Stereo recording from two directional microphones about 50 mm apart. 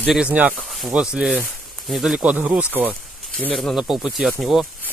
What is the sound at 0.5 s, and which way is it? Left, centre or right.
Speech, centre.